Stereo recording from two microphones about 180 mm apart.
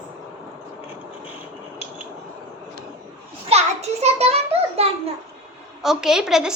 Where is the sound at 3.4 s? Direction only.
35° right (ahead or behind).